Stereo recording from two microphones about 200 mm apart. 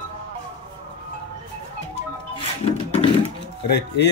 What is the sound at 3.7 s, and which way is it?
Speech, 55° left (ahead or behind).